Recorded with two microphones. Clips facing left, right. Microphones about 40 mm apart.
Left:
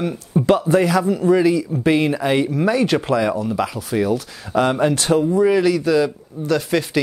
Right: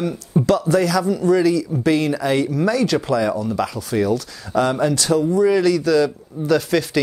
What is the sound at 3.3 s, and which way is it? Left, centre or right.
Speech, centre.